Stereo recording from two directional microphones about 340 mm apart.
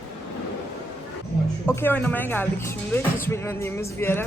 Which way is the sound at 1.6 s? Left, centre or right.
Centre.